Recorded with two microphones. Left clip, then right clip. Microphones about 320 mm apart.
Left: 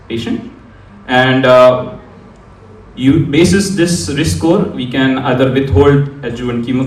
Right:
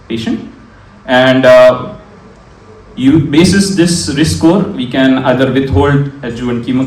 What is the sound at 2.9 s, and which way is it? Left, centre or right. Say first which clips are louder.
A man's voice: right 2 dB; right.